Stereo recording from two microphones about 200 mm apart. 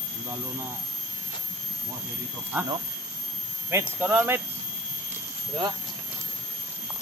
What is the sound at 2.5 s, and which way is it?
Speech, 10° right (ahead or behind).